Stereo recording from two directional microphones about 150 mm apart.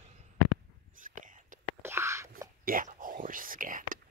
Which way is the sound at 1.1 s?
60° right (ahead or behind).